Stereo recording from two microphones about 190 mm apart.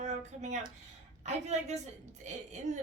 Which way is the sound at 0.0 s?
40° right (ahead or behind).